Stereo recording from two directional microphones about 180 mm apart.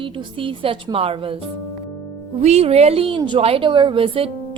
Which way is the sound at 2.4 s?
35° right (ahead or behind).